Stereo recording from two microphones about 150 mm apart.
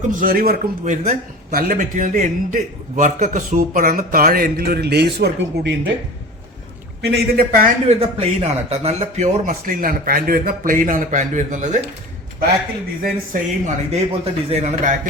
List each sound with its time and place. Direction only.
0.2 s a man's voice: 75° right (ahead or behind)
1.0 s a man's voice: 65° right (ahead or behind); by 5.7 s 90° right
7.0 s speech: 90° right
7.9 s a man's voice: 40° right (ahead or behind)
13.0 s a man's voice: 70° right (ahead or behind)
14.1 s speech: 45° right (ahead or behind)